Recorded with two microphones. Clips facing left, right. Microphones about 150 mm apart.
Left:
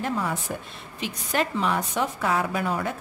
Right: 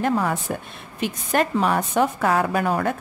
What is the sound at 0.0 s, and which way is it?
A woman's voice, 60° right (ahead or behind).